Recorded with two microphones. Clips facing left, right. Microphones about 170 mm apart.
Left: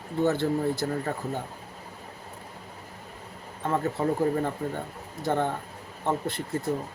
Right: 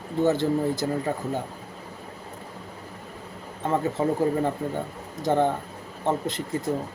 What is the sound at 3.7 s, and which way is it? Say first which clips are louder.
Speech: right 2 dB; 20° right (ahead or behind).